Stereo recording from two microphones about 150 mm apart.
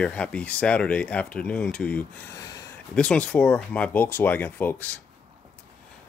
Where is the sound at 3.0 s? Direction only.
5° left (ahead or behind).